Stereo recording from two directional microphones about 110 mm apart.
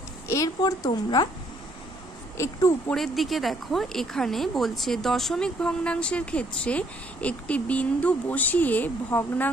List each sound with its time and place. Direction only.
0.6 s a woman's voice: 40° left (ahead or behind)
2.3 s speech: 25° left (ahead or behind)
2.9 s speech: centre (ahead or behind)